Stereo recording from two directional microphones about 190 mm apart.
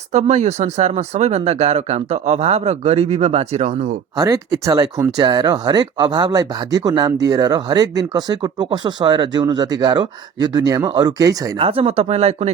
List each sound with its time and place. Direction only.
0.1 s speech: 35° right (ahead or behind)
4.2 s speech: 15° right (ahead or behind)
11.5 s speech: 30° right (ahead or behind)